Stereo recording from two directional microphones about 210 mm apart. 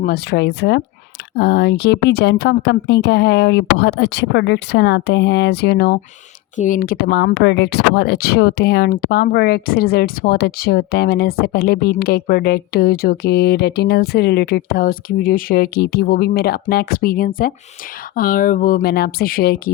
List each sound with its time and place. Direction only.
0.0 s speech: 50° left (ahead or behind)